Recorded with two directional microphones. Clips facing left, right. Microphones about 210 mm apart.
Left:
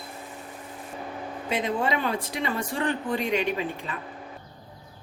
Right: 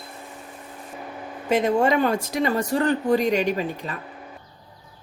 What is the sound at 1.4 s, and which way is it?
Speech, 45° right (ahead or behind).